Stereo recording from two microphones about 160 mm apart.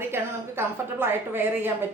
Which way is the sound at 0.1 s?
15° right (ahead or behind).